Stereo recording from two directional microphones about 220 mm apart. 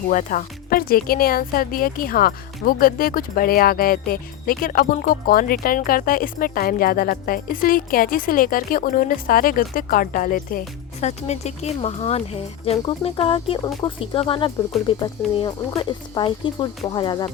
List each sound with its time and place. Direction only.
0.1 s speech: 35° left (ahead or behind)